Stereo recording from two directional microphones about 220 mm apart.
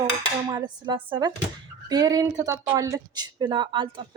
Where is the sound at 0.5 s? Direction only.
20° right (ahead or behind).